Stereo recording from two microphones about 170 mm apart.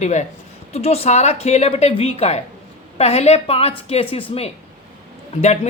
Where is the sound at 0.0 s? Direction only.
45° left (ahead or behind).